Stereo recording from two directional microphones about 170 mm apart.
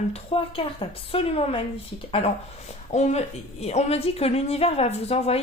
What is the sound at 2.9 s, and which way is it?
A woman's voice, 45° left (ahead or behind).